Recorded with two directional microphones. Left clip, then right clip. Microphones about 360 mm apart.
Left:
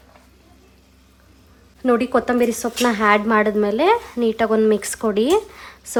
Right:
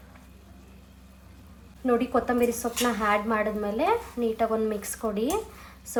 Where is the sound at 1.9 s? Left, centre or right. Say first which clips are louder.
Left 7 dB; left.